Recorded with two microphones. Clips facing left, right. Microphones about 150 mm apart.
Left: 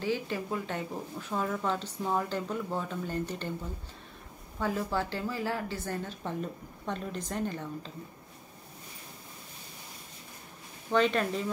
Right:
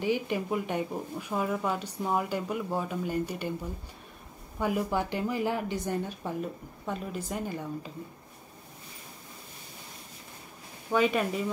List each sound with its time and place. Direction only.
0.0 s speech: 15° right (ahead or behind)
4.6 s speech: 15° right (ahead or behind)
10.9 s speech: 10° right (ahead or behind)